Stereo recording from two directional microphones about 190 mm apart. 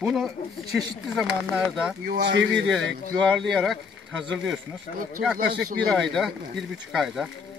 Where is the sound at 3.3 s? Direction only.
Centre (ahead or behind).